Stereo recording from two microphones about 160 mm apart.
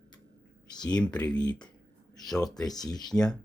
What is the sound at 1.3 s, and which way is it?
Speech, 25° left (ahead or behind).